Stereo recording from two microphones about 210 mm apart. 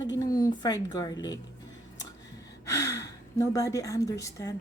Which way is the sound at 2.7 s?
15° left (ahead or behind).